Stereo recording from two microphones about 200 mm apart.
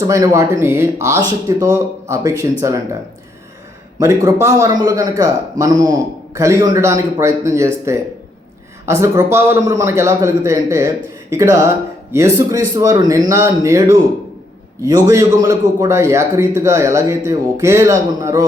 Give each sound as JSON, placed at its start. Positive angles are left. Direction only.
{"t": 0.1, "sound": "a man's voice", "side_deg": -15}
{"t": 4.0, "sound": "a man's voice", "side_deg": -15}